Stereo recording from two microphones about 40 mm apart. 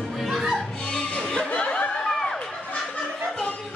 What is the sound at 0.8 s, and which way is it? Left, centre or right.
Music, left.